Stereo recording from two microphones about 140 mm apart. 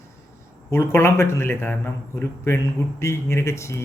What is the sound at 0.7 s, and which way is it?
Speech, 20° left (ahead or behind).